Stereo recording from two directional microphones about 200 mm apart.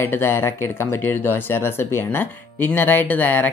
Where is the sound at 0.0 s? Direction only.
10° left (ahead or behind).